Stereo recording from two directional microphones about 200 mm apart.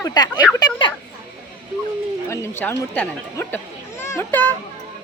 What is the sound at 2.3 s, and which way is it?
Speech, 10° left (ahead or behind).